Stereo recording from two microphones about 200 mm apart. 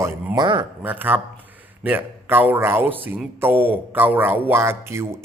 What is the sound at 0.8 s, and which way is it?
A man's voice, 10° right (ahead or behind).